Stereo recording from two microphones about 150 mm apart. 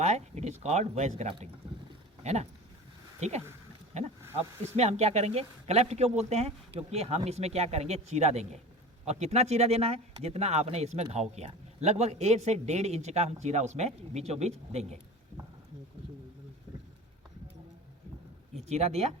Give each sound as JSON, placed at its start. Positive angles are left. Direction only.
{"t": 0.0, "sound": "speech", "side_deg": -50}
{"t": 4.8, "sound": "speech", "side_deg": -45}
{"t": 18.7, "sound": "speech", "side_deg": -45}